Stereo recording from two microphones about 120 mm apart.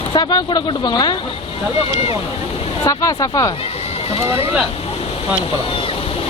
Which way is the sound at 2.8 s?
30° left (ahead or behind).